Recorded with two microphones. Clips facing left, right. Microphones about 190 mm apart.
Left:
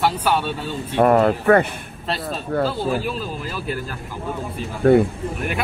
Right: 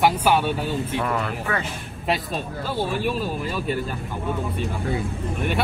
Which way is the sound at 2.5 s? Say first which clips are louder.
Left 12 dB; 65° left (ahead or behind).